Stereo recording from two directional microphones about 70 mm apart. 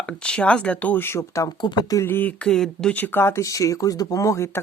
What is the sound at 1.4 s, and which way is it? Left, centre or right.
Speech, left.